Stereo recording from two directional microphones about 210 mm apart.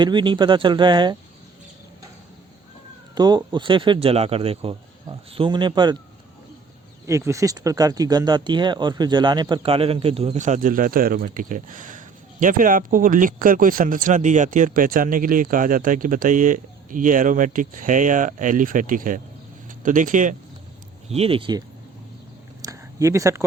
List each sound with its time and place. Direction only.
0.0 s speech: 20° right (ahead or behind)
3.2 s speech: 20° right (ahead or behind)
7.1 s speech: 15° right (ahead or behind); by 20.3 s 40° right (ahead or behind)
21.1 s speech: 25° right (ahead or behind)
22.6 s a sound: 15° right (ahead or behind)